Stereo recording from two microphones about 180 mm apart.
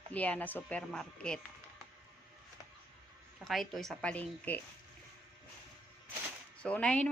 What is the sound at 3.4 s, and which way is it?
A woman's voice, centre (ahead or behind).